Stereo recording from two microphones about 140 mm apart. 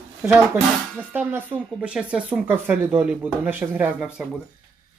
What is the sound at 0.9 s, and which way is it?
Speech, 10° right (ahead or behind).